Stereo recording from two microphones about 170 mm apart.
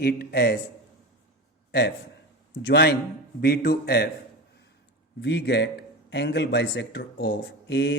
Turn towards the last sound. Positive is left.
turn(degrees=90)